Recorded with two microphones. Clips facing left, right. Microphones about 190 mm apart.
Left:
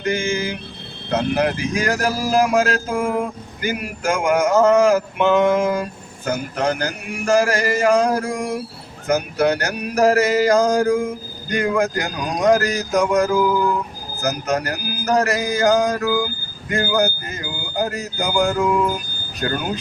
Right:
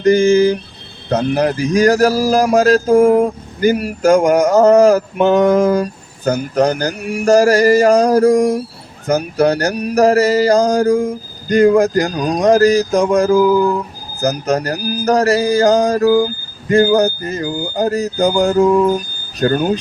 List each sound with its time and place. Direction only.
0.0 s mantra: 40° right (ahead or behind)
1.1 s speech: 40° right (ahead or behind)